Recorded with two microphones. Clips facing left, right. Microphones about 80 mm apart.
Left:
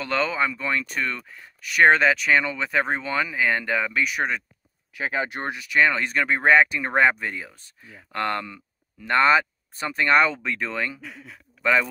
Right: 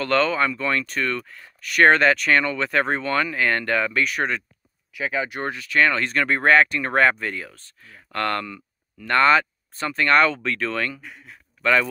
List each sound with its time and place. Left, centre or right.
0.0 s speech: centre
4.9 s speech: left
5.4 s a man's voice: centre